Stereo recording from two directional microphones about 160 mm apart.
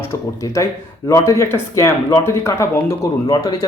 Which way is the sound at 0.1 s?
20° left (ahead or behind).